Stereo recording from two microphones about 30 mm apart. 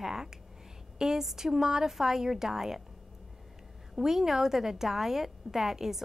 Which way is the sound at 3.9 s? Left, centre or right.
Centre.